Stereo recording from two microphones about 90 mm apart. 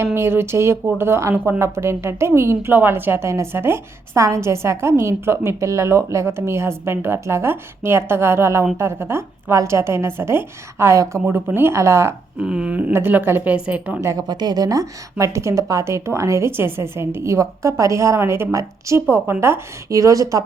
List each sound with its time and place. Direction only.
0.0 s a woman's voice: 25° right (ahead or behind)
12.4 s a sound: 10° right (ahead or behind)
12.9 s a woman's voice: 20° right (ahead or behind)
14.0 s a woman's voice: 35° right (ahead or behind)
14.3 s a woman's voice: 50° right (ahead or behind)